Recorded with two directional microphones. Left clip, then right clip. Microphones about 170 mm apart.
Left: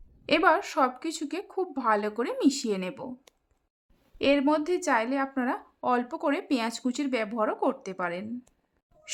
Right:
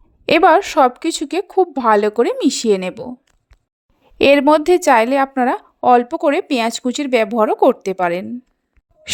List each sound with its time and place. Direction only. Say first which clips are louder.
0.3 s a woman's voice: right 12 dB; 45° right (ahead or behind)
4.2 s a woman's voice: right 13 dB; 50° right (ahead or behind)